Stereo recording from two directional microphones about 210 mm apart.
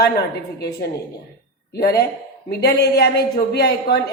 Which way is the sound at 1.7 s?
50° left (ahead or behind).